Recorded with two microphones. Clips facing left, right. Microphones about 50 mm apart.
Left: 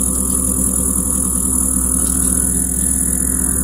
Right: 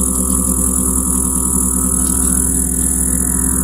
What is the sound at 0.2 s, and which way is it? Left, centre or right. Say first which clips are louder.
Music: right 3 dB; right.